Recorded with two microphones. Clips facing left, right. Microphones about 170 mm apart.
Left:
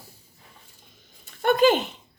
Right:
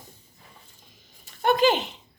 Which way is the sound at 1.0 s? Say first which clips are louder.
Even; 50° left (ahead or behind).